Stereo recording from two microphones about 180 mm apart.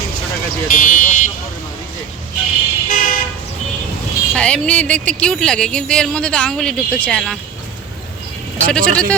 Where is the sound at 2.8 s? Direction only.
50° left (ahead or behind).